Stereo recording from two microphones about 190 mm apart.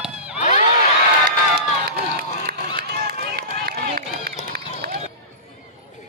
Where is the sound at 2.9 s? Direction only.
55° right (ahead or behind).